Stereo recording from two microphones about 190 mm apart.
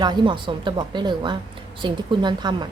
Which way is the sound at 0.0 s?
25° right (ahead or behind).